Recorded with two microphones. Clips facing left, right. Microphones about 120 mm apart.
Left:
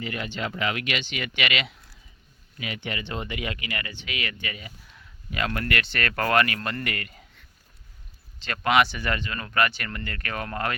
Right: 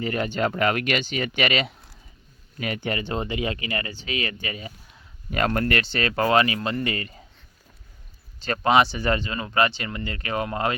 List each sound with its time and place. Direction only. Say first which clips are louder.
0.0 s speech: right 7 dB; 40° right (ahead or behind)
5.3 s speech: right 5 dB; 45° right (ahead or behind); by 7.3 s 25° right (ahead or behind)
8.4 s speech: right 3 dB; 35° right (ahead or behind)